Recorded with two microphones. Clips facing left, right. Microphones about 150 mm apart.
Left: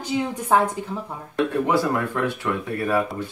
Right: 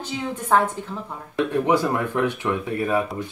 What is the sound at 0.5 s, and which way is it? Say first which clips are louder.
Speech: even; 15° left (ahead or behind).